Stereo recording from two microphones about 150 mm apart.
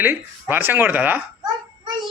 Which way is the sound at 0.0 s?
15° right (ahead or behind).